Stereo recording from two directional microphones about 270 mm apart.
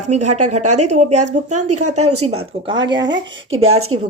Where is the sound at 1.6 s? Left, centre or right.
Right.